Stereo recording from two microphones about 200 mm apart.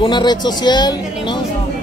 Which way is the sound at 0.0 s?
20° left (ahead or behind).